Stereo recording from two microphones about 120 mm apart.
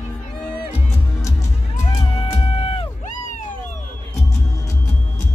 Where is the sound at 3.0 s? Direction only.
90° left.